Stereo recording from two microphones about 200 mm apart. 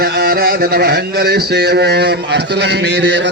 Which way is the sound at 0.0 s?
50° right (ahead or behind).